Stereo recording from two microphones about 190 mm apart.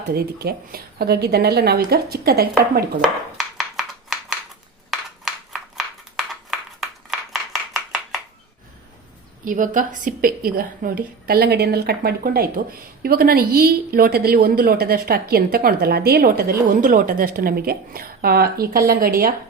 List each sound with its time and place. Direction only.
0.1 s speech: 55° right (ahead or behind)
3.0 s a sound: centre (ahead or behind)
9.4 s a woman's voice: 45° right (ahead or behind)